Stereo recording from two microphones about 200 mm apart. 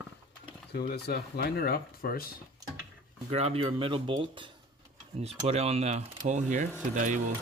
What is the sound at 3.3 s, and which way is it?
Speech, 30° right (ahead or behind).